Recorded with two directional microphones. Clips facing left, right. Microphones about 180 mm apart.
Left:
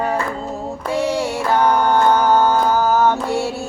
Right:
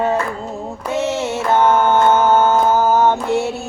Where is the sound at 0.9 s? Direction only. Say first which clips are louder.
Even; 20° right (ahead or behind).